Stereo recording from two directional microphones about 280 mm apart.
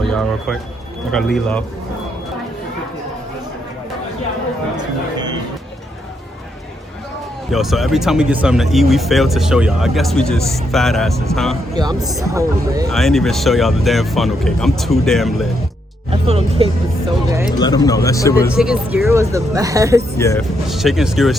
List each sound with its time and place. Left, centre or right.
0.1 s speech: centre
7.5 s speech: centre
11.8 s speech: centre
12.9 s speech: centre
16.0 s speech: right
17.6 s speech: centre
18.5 s speech: centre
20.1 s speech: centre
20.7 s speech: centre